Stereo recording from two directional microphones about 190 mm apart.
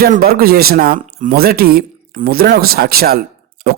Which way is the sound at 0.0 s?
55° right (ahead or behind).